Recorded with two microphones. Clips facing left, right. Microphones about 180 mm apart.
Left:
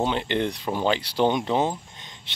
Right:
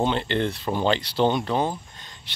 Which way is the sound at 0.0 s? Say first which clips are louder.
Right 1 dB; 10° left (ahead or behind).